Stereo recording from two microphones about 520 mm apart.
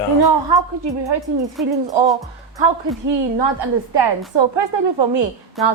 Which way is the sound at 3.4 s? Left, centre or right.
Right.